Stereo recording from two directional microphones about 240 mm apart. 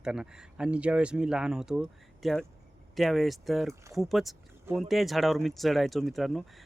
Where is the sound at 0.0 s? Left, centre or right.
Centre.